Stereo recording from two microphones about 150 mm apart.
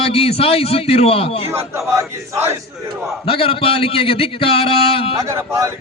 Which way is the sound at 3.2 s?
40° left (ahead or behind).